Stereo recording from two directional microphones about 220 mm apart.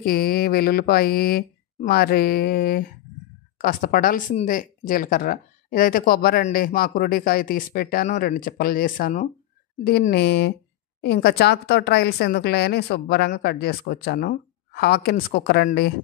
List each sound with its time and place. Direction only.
0.0 s speech: 45° left (ahead or behind)